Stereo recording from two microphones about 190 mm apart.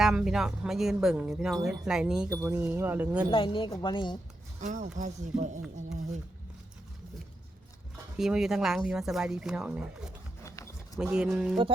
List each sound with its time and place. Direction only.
0.0 s speech: 5° right (ahead or behind)
2.3 s speech: 15° right (ahead or behind)
3.3 s a woman's voice: 25° left (ahead or behind)
4.6 s speech: 40° right (ahead or behind)
8.2 s speech: centre (ahead or behind)
10.4 s a sound: 15° left (ahead or behind)
10.9 s speech: 5° right (ahead or behind)